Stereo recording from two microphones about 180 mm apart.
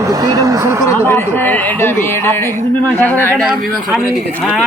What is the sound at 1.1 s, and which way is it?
Speech, 10° left (ahead or behind).